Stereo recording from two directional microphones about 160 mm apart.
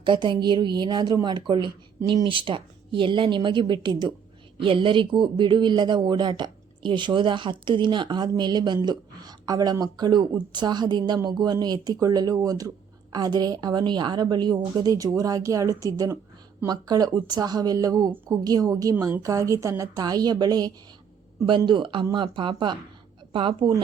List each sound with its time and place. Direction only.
0.0 s speech: 30° right (ahead or behind)